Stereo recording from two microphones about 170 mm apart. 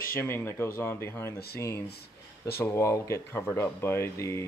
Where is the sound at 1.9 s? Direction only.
65° left (ahead or behind).